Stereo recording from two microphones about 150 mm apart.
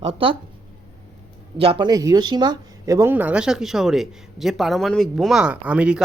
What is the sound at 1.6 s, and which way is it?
Speech, 35° right (ahead or behind).